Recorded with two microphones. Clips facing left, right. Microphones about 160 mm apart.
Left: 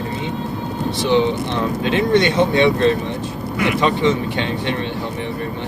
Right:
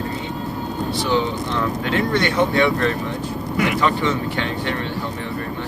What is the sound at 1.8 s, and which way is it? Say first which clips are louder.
Speech: left 6 dB; 20° left (ahead or behind).